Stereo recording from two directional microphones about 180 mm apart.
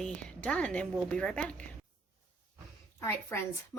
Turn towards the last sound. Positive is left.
turn(degrees=15)  # may be behind; listen again after turning